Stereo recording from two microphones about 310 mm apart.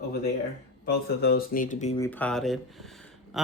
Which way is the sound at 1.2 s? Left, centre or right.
Left.